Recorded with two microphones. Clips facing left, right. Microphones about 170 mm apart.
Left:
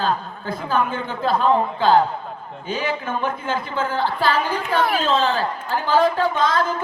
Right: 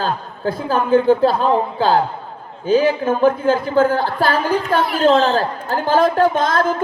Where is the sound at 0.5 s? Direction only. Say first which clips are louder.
Right 7 dB; 35° right (ahead or behind).